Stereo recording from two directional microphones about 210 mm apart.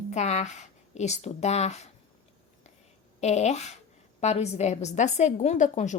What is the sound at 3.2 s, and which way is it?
Speech, 35° left (ahead or behind).